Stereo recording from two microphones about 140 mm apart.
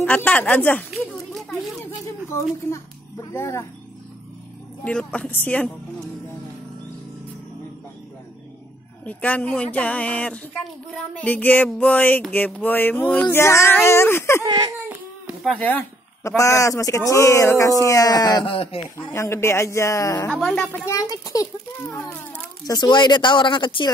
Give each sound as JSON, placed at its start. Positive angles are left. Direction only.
{"t": 0.0, "sound": "speech", "side_deg": 10}
{"t": 1.3, "sound": "a sound", "side_deg": 0}
{"t": 3.3, "sound": "speech", "side_deg": 20}
{"t": 4.8, "sound": "speech", "side_deg": 5}
{"t": 9.0, "sound": "speech", "side_deg": 10}
{"t": 14.4, "sound": "a child's voice", "side_deg": -25}
{"t": 14.9, "sound": "a sound", "side_deg": -5}
{"t": 16.3, "sound": "speech", "side_deg": 20}
{"t": 18.5, "sound": "speech", "side_deg": 40}
{"t": 18.9, "sound": "speech", "side_deg": 20}
{"t": 20.3, "sound": "speech", "side_deg": 10}
{"t": 20.9, "sound": "speech", "side_deg": 25}
{"t": 22.7, "sound": "speech", "side_deg": 30}